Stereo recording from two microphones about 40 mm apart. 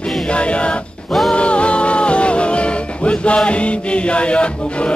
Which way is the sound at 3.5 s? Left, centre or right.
Left.